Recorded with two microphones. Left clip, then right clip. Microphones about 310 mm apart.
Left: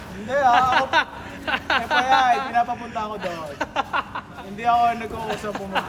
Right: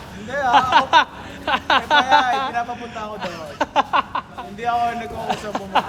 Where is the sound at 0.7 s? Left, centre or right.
Centre.